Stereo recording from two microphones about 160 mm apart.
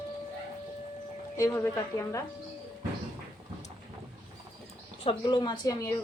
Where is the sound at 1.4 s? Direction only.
15° left (ahead or behind).